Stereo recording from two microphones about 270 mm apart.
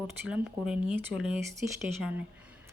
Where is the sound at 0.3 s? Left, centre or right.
Centre.